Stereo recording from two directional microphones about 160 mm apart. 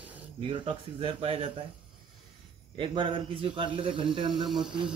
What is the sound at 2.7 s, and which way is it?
Speech, 30° right (ahead or behind).